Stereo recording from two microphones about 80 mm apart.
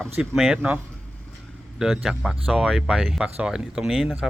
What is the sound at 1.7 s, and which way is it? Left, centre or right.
Speech, centre.